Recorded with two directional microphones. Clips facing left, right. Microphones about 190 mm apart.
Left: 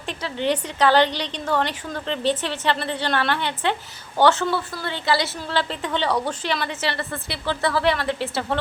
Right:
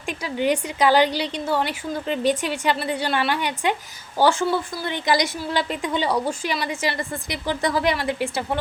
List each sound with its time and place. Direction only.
0.1 s a woman's voice: 10° right (ahead or behind)